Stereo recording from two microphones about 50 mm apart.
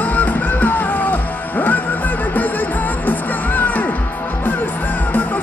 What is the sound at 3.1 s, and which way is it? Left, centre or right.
Music, left.